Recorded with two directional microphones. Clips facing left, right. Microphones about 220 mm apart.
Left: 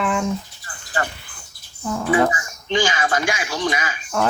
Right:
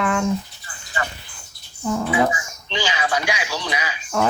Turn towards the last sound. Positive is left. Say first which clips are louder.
# left 4 dB
turn(degrees=50)  # may be behind; listen again after turning